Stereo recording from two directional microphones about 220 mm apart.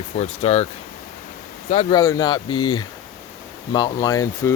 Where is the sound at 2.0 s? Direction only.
15° left (ahead or behind).